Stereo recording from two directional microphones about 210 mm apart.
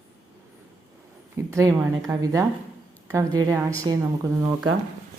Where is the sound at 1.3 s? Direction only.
15° right (ahead or behind).